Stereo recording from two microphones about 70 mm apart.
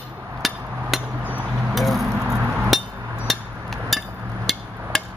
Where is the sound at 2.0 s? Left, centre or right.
Right.